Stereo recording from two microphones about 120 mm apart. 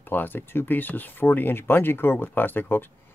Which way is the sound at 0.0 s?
15° left (ahead or behind).